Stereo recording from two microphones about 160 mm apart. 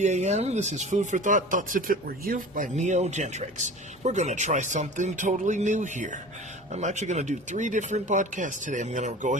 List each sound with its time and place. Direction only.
0.0 s speech: 45° right (ahead or behind)